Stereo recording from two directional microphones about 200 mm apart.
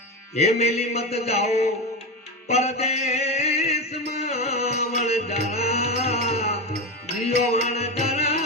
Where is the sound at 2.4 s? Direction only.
30° left (ahead or behind).